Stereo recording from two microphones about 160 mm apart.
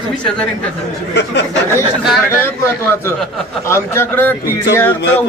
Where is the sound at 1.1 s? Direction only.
90° left.